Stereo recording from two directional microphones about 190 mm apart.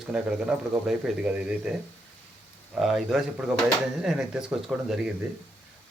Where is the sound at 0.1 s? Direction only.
5° right (ahead or behind).